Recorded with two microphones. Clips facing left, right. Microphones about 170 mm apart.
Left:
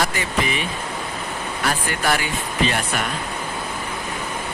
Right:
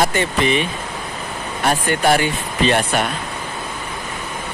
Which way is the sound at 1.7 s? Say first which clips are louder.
Right 6 dB; 25° right (ahead or behind).